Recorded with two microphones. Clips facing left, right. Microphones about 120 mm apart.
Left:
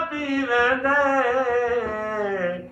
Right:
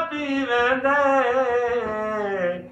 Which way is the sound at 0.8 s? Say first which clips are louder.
Right 1 dB; 15° right (ahead or behind).